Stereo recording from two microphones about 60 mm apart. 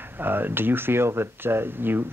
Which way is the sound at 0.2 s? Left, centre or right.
Right.